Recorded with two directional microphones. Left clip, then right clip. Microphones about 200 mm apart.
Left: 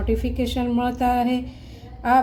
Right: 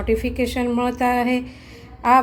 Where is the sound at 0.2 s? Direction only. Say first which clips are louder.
Right 3 dB; 10° right (ahead or behind).